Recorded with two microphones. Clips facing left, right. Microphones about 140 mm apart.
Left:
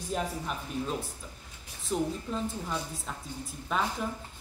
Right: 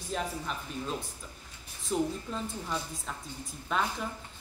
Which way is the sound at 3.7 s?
5° left (ahead or behind).